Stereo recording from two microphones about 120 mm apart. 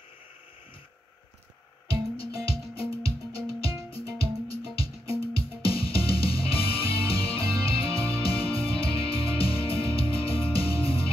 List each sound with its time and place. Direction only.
2.1 s music: 50° left (ahead or behind)